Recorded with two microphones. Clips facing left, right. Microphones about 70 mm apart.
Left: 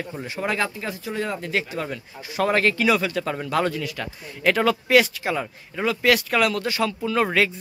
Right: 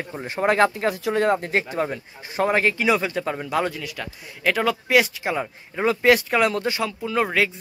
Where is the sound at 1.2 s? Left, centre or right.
Right.